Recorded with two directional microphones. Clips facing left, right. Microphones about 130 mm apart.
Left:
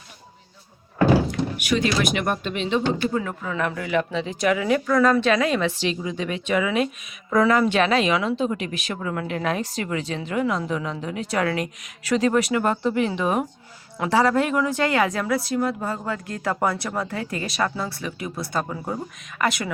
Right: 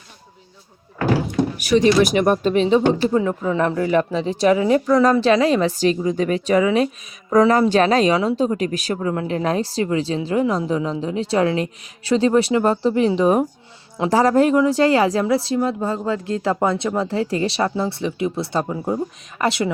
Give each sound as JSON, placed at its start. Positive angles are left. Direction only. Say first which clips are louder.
{"t": 1.5, "sound": "speech", "louder": "right 9 dB", "side_deg": -35}